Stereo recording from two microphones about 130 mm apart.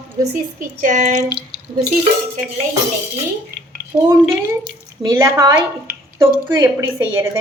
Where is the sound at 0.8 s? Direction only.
80° right.